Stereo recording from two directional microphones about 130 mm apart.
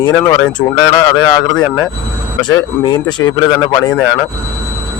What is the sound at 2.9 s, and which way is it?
Speech, 30° left (ahead or behind).